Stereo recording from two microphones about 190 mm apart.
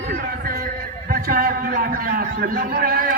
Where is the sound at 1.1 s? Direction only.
50° right (ahead or behind).